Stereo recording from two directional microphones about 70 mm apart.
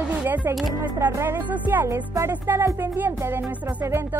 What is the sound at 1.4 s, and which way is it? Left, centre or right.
Speech, right.